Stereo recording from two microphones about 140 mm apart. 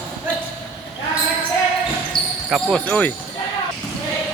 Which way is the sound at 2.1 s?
35° left (ahead or behind).